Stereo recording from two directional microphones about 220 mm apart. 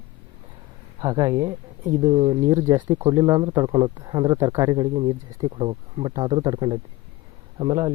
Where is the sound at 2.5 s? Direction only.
15° right (ahead or behind).